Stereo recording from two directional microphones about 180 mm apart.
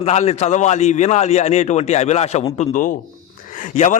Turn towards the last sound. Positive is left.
turn(degrees=40)  # may be behind; listen again after turning